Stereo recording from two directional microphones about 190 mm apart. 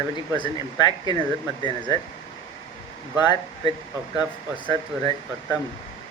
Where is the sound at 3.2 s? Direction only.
25° left (ahead or behind).